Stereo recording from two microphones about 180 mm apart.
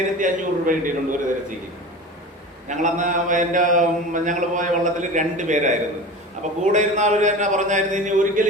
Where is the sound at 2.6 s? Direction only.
45° right (ahead or behind).